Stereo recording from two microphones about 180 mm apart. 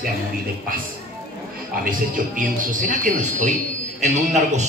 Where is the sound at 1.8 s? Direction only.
50° right (ahead or behind).